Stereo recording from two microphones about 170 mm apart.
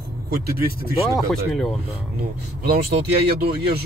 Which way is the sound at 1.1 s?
Centre (ahead or behind).